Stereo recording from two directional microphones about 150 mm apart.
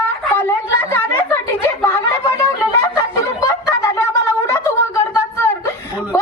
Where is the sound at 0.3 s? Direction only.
15° left (ahead or behind).